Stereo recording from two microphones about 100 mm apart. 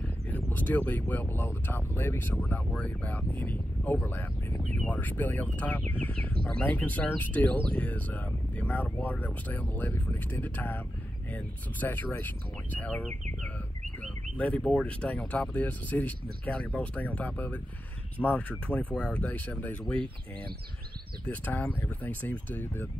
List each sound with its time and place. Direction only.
0.5 s speech: 15° left (ahead or behind)
21.3 s speech: 15° left (ahead or behind)